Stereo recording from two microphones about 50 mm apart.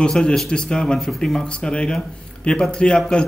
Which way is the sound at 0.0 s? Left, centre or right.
Centre.